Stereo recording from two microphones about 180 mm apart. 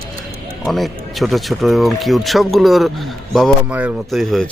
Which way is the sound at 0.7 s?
Centre (ahead or behind).